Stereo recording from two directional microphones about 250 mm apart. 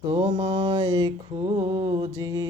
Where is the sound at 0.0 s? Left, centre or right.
Centre.